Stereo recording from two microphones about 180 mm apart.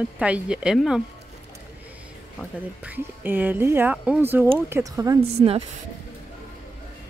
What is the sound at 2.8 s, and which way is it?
Speech, 10° right (ahead or behind).